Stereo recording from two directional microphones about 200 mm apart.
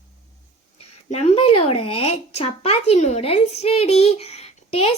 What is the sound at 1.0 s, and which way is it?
Speech, 35° left (ahead or behind).